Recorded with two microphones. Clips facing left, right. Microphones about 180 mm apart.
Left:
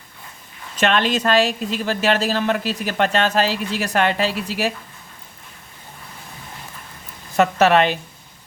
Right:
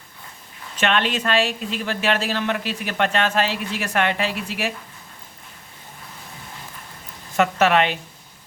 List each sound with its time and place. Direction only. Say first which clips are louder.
0.8 s a woman's voice: left 3 dB; 40° left (ahead or behind)
7.3 s speech: left 3 dB; 35° left (ahead or behind)